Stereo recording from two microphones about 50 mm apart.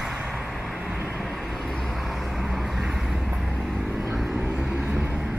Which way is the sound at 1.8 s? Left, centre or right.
Centre.